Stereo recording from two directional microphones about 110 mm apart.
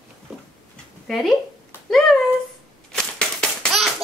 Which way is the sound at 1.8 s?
5° left (ahead or behind).